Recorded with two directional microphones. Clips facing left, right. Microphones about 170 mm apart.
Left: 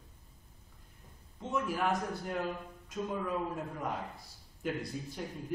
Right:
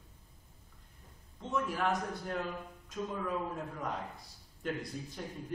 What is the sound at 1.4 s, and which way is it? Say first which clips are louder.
A man's voice: left 1 dB; 5° left (ahead or behind).